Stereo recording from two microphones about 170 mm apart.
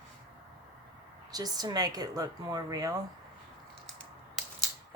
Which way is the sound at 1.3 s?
25° right (ahead or behind).